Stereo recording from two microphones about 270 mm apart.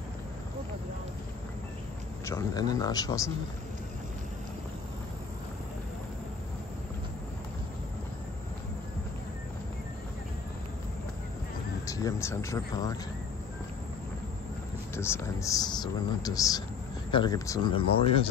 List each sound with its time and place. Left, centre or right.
2.2 s speech: centre
11.8 s speech: centre
15.0 s speech: centre